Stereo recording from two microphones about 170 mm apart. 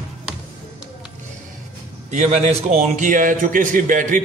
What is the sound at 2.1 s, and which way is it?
A man's voice, 45° right (ahead or behind).